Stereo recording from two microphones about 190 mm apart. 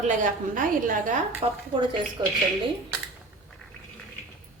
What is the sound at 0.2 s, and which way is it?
Speech, 45° right (ahead or behind).